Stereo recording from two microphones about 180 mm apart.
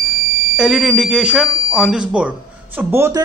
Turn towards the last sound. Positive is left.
turn(degrees=-15)  # may be behind; listen again after turning